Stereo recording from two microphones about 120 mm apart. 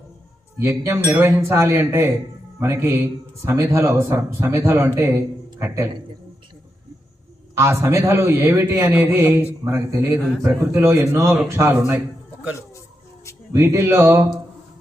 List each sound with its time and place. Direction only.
0.6 s a man's voice: 20° right (ahead or behind)
7.5 s a man's voice: 20° right (ahead or behind)
13.5 s a man's voice: 20° right (ahead or behind)